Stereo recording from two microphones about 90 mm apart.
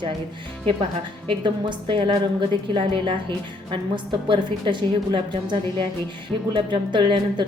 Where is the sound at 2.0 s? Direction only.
65° right (ahead or behind).